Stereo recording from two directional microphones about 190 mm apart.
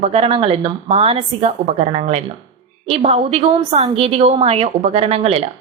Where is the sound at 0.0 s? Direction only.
30° right (ahead or behind).